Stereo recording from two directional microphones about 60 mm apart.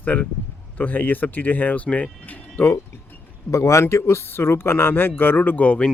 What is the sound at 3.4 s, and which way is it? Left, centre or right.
Speech, left.